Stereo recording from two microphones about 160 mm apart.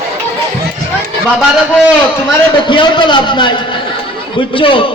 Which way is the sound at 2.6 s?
30° left (ahead or behind).